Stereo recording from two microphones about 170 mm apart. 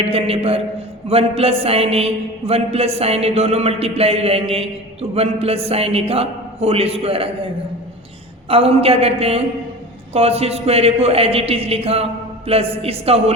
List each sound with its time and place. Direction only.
0.0 s a man's voice: 35° right (ahead or behind)
8.4 s a man's voice: 35° right (ahead or behind)